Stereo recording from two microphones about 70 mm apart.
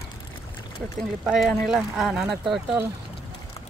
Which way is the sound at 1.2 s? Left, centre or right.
Centre.